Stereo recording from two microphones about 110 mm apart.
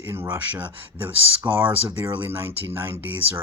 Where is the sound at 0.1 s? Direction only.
20° right (ahead or behind).